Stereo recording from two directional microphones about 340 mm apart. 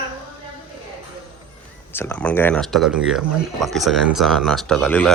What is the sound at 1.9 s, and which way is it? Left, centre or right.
Speech, centre.